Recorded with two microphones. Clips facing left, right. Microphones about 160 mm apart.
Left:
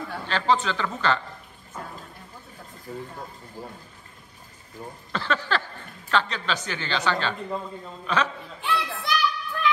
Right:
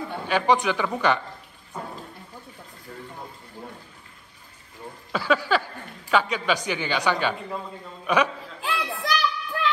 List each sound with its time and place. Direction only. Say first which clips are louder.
0.3 s speech: right 2 dB; 15° right (ahead or behind)
2.9 s speech: left 5 dB; 5° left (ahead or behind)
5.1 s speech: right 4 dB; 10° right (ahead or behind)
8.6 s a sound: even; 35° right (ahead or behind)